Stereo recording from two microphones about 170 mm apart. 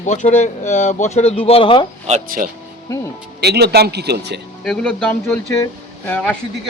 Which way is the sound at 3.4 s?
75° right (ahead or behind).